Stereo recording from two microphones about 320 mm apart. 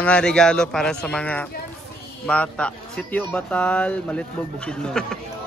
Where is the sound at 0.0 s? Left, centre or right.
Centre.